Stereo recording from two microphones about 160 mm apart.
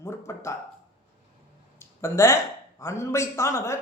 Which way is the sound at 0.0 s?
15° left (ahead or behind).